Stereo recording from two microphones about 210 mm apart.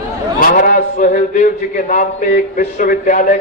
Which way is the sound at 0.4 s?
45° left (ahead or behind).